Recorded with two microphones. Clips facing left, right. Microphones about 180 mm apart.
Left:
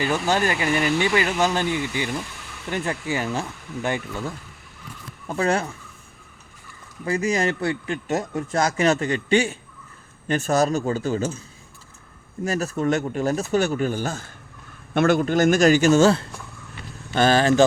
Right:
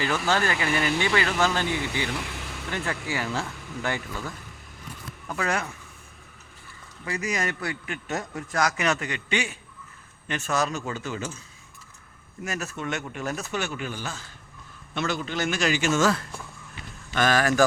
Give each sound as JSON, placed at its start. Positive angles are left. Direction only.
{"t": 0.0, "sound": "speech", "side_deg": 20}
{"t": 7.0, "sound": "speech", "side_deg": 30}
{"t": 12.5, "sound": "speech", "side_deg": 35}